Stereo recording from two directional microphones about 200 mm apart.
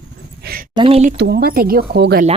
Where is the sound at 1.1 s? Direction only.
55° right (ahead or behind).